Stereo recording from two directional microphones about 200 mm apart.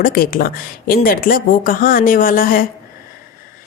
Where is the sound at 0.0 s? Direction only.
45° left (ahead or behind).